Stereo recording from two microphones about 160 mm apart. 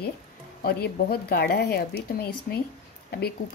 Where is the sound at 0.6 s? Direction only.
75° left (ahead or behind).